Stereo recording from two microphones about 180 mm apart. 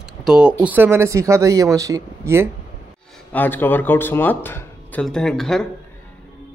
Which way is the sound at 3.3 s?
10° left (ahead or behind).